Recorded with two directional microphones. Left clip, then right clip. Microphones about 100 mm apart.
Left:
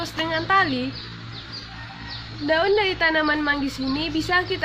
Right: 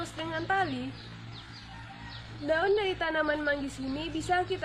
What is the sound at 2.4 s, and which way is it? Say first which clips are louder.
A woman's voice: left 7 dB; centre (ahead or behind).